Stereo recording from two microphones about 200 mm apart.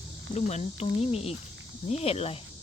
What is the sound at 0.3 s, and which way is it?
Cricket, 35° left (ahead or behind).